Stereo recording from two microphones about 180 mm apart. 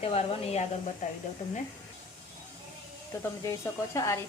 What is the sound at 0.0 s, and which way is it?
Speech, 35° left (ahead or behind).